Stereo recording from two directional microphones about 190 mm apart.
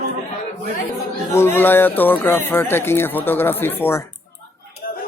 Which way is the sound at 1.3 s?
10° left (ahead or behind).